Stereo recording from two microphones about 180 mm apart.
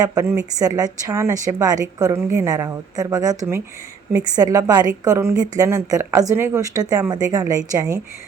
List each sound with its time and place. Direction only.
0.0 s a woman's voice: 20° right (ahead or behind)